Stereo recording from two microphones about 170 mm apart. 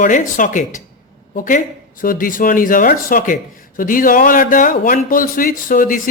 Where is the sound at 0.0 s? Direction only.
50° left (ahead or behind).